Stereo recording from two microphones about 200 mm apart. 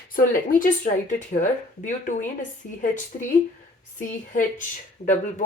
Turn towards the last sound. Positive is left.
turn(degrees=40)  # may be behind; listen again after turning